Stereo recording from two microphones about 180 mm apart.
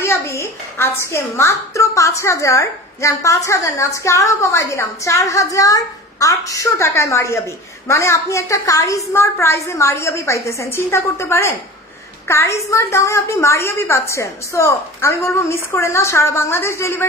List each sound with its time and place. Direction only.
0.0 s a woman's voice: 15° left (ahead or behind)